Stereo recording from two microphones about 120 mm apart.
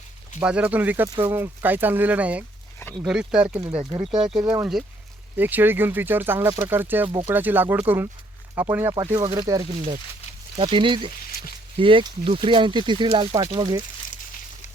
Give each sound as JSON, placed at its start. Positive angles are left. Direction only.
{"t": 0.3, "sound": "speech", "side_deg": -10}
{"t": 3.8, "sound": "speech", "side_deg": -40}
{"t": 4.4, "sound": "speech", "side_deg": -30}
{"t": 5.4, "sound": "speech", "side_deg": -15}
{"t": 9.1, "sound": "speech", "side_deg": -35}
{"t": 10.6, "sound": "speech", "side_deg": -45}